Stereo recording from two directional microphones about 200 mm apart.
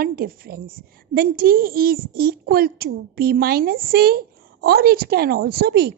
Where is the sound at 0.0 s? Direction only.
50° right (ahead or behind).